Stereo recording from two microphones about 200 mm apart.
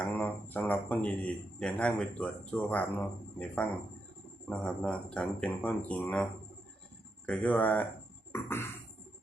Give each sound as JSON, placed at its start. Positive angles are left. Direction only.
{"t": 0.0, "sound": "a man's voice", "side_deg": 10}
{"t": 7.3, "sound": "a man's voice", "side_deg": 5}
{"t": 8.3, "sound": "beatboxing", "side_deg": 10}